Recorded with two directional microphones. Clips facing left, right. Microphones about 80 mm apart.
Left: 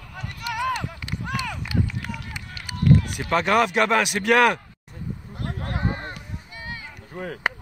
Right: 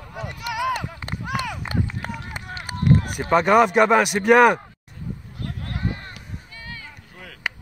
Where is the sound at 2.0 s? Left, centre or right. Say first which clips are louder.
Right 2 dB; right.